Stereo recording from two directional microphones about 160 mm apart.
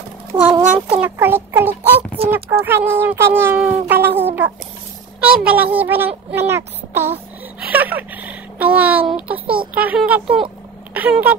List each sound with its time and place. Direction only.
0.5 s speech: 30° right (ahead or behind)
0.9 s speech: 10° right (ahead or behind)
2.2 s speech: 40° right (ahead or behind)
2.6 s speech: 15° right (ahead or behind)
7.7 s a sound: 10° right (ahead or behind)
9.1 s a child's voice: 10° right (ahead or behind)
10.2 s speech: 35° right (ahead or behind)
10.9 s speech: 10° right (ahead or behind)